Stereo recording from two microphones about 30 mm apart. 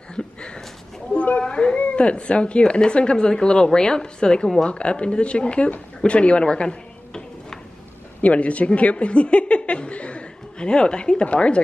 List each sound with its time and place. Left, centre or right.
0.2 s a sound: left
1.1 s cat: left
1.5 s speech: left
8.2 s a woman's voice: left